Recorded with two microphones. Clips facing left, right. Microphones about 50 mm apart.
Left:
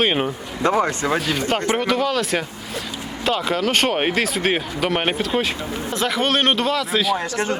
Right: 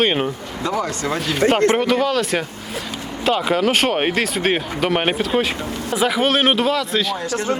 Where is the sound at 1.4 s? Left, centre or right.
Right.